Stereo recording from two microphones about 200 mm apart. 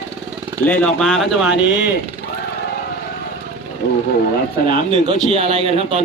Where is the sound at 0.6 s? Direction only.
5° left (ahead or behind).